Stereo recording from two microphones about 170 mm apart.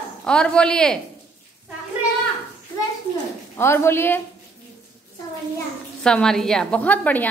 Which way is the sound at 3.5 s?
15° left (ahead or behind).